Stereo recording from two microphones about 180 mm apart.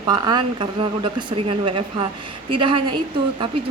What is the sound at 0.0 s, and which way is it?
A woman's voice, 20° right (ahead or behind).